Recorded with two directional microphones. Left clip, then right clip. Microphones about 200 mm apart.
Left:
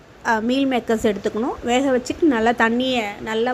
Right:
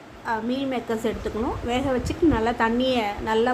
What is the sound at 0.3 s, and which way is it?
A woman's voice, 35° left (ahead or behind).